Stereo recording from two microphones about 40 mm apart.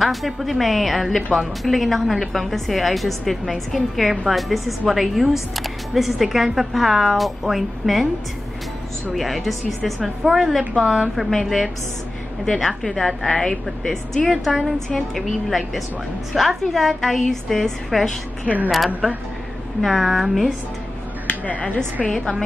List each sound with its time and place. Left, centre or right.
0.0 s speech: centre
9.1 s a woman's voice: centre
19.8 s speech: centre
21.3 s speech: left